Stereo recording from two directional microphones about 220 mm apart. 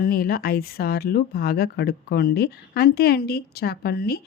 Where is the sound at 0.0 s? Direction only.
40° left (ahead or behind).